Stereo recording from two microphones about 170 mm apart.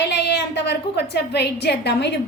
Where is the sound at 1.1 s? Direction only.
80° left.